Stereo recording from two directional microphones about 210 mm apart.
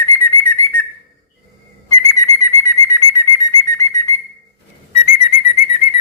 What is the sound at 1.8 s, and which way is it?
Bird, 15° left (ahead or behind).